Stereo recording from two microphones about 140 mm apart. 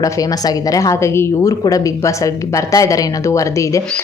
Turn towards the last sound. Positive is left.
turn(degrees=20)  # may be behind; listen again after turning